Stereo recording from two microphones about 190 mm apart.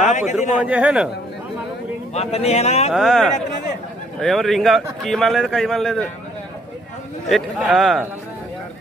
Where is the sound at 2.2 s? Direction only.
35° left (ahead or behind).